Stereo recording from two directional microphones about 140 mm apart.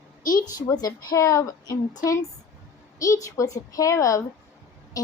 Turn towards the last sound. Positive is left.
turn(degrees=25)  # may be behind; listen again after turning